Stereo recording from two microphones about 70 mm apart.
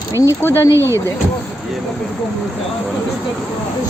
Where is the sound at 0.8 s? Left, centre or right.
Right.